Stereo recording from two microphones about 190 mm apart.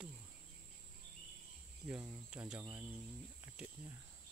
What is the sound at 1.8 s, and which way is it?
Speech, 5° right (ahead or behind).